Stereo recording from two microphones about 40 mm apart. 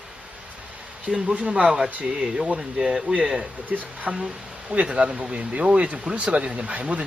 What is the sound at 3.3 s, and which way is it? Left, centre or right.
Speech, right.